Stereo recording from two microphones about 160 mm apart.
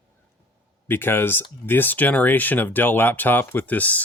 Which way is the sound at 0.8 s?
15° left (ahead or behind).